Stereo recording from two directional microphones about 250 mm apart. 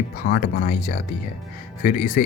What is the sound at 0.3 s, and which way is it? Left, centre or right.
Speech, left.